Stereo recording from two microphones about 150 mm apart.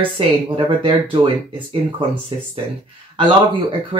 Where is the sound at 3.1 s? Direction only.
35° right (ahead or behind).